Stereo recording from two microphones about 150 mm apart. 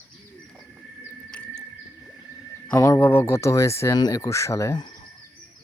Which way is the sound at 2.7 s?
20° left (ahead or behind).